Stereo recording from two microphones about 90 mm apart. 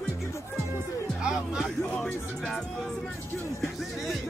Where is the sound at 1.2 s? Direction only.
5° right (ahead or behind).